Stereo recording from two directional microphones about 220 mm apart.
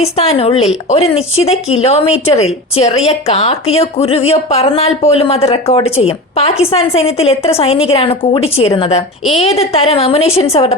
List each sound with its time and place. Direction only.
0.0 s speech: 25° left (ahead or behind)